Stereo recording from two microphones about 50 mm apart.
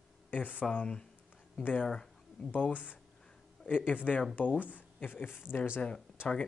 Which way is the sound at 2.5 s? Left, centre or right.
Left.